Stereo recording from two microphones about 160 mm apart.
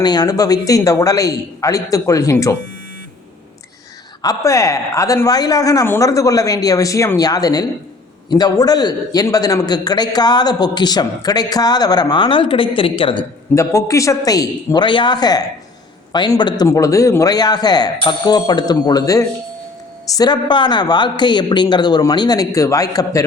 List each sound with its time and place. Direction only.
0.0 s a man's voice: 25° left (ahead or behind)
4.2 s a man's voice: 20° left (ahead or behind)
13.6 s a man's voice: 20° left (ahead or behind)